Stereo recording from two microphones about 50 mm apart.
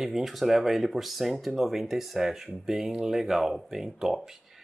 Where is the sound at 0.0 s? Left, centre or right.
Centre.